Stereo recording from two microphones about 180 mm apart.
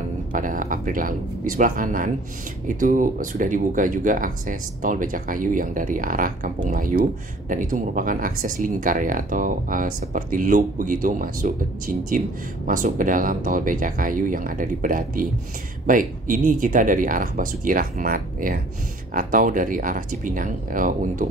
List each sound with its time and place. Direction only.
0.3 s speech: 45° right (ahead or behind)